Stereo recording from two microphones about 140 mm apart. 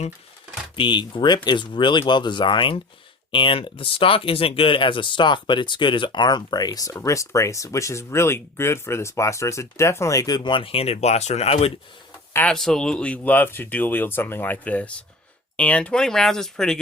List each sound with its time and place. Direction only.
0.8 s speech: 35° left (ahead or behind)
12.3 s speech: 10° left (ahead or behind)